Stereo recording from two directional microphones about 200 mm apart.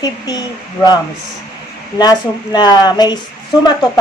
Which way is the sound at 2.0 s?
20° left (ahead or behind).